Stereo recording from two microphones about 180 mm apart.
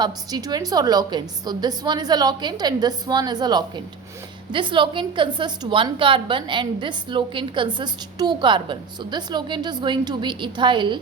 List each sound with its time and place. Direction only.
0.0 s a woman's voice: 20° right (ahead or behind)